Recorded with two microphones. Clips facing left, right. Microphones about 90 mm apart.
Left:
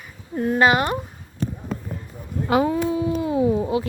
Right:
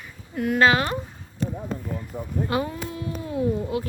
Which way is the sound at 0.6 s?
20° left (ahead or behind).